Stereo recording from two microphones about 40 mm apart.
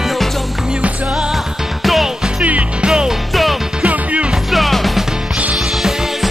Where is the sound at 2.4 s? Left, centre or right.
Right.